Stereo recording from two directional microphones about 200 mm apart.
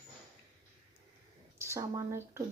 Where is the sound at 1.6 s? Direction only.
15° right (ahead or behind).